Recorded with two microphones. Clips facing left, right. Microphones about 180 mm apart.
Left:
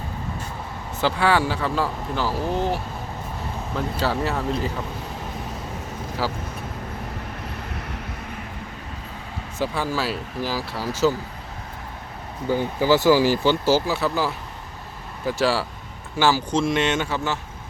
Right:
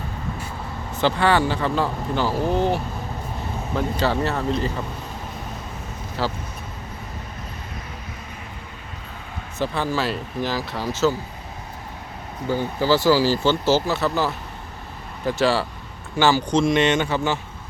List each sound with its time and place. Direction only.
1.0 s speech: 5° left (ahead or behind)
6.2 s speech: 10° left (ahead or behind)
9.6 s speech: 10° left (ahead or behind)
12.5 s speech: 15° left (ahead or behind)